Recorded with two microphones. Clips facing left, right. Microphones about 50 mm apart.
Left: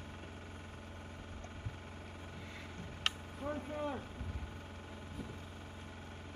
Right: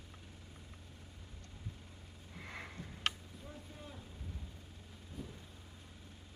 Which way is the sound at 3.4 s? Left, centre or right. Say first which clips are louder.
Left 14 dB; left.